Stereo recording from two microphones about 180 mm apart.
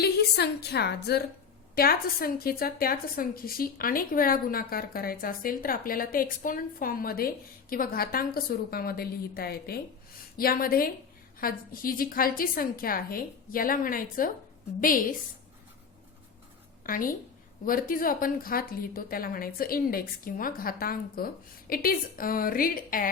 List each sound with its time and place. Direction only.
0.0 s a woman's voice: 65° left (ahead or behind)
16.8 s a woman's voice: 50° left (ahead or behind)